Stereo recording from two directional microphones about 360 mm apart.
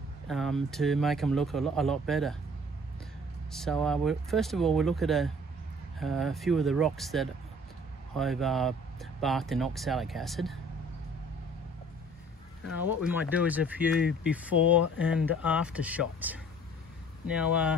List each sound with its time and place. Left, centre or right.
0.3 s speech: centre
3.5 s speech: centre
13.0 s speech: centre
17.4 s speech: centre